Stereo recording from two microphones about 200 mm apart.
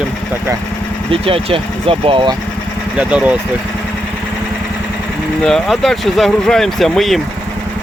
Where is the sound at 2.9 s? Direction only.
5° right (ahead or behind).